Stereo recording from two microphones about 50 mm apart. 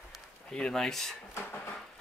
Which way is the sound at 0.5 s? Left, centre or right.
Centre.